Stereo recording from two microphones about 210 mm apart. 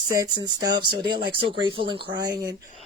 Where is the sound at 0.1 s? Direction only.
20° right (ahead or behind).